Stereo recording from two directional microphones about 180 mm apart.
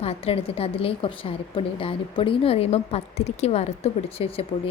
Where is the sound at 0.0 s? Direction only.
35° left (ahead or behind).